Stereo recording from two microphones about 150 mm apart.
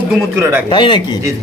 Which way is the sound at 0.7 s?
30° left (ahead or behind).